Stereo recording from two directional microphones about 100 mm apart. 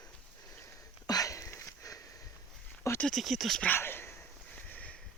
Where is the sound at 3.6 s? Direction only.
20° left (ahead or behind).